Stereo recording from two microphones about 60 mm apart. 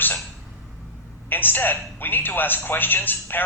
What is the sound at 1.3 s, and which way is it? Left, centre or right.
Speech, left.